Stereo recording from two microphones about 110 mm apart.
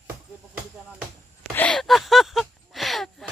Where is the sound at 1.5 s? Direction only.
10° left (ahead or behind).